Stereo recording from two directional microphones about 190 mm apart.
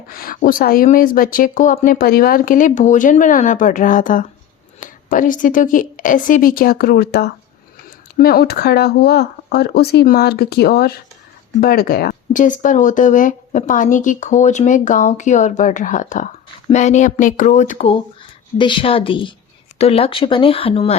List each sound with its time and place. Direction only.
0.2 s a woman's voice: 50° left (ahead or behind); by 20.9 s 30° left (ahead or behind)